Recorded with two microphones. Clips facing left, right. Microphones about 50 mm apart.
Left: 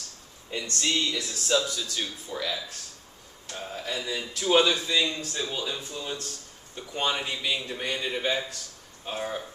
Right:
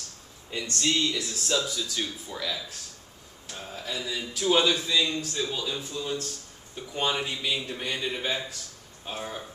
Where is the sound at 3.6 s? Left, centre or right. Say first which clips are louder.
Left 2 dB; centre.